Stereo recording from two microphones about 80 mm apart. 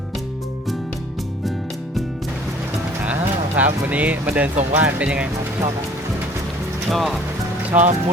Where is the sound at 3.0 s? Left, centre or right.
Centre.